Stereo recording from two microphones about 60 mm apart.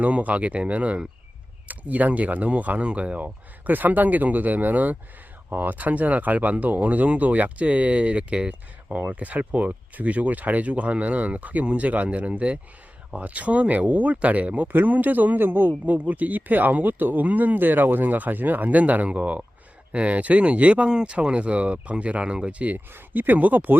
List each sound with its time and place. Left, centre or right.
0.0 s speech: right